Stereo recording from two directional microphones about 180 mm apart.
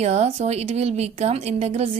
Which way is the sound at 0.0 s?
35° right (ahead or behind).